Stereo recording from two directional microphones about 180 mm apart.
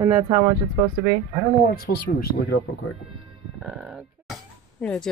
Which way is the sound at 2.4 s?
70° left (ahead or behind).